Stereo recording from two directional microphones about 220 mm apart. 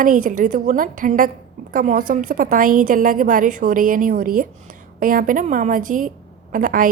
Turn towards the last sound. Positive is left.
turn(degrees=-40)  # may be behind; listen again after turning